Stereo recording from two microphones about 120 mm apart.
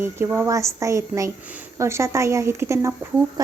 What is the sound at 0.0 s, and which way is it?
Speech, 20° right (ahead or behind).